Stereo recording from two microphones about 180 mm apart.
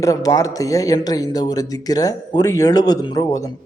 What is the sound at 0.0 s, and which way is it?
Speech, 20° left (ahead or behind).